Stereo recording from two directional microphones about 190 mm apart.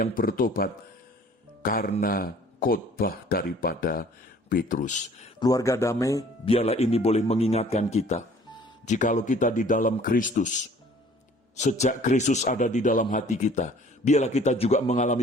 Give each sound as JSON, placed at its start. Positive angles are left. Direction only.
{"t": 0.0, "sound": "a man's voice", "side_deg": 50}
{"t": 5.4, "sound": "speech", "side_deg": 20}
{"t": 6.4, "sound": "a man's voice", "side_deg": 30}